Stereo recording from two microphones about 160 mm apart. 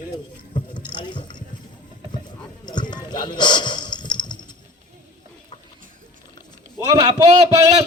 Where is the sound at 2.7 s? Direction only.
30° left (ahead or behind).